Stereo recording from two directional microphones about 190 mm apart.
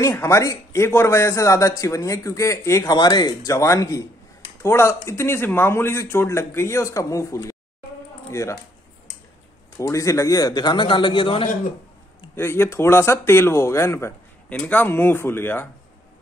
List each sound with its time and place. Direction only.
0.0 s speech: 15° left (ahead or behind)
9.8 s a man's voice: 15° left (ahead or behind)
12.4 s speech: 10° left (ahead or behind)